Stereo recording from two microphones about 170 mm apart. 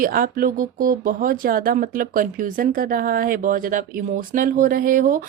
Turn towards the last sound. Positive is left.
turn(degrees=-55)  # may be behind; listen again after turning